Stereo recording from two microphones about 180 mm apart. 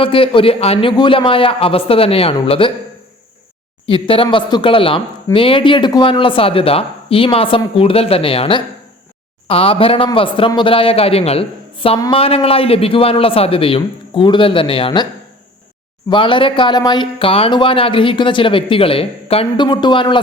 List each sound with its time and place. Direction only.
0.0 s a man's voice: 30° left (ahead or behind)
3.8 s a man's voice: 30° left (ahead or behind)
16.0 s speech: 25° left (ahead or behind)